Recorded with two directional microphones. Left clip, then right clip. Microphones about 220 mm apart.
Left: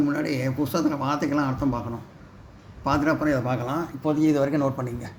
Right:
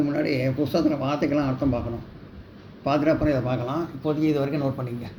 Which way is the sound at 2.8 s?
35° left (ahead or behind).